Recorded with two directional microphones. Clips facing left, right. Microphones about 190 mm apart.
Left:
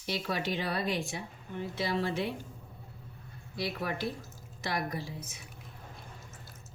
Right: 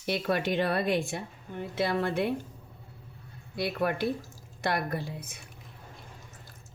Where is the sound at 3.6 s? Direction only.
60° right (ahead or behind).